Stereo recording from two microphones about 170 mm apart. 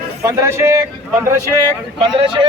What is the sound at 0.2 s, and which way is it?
Speech, 15° right (ahead or behind).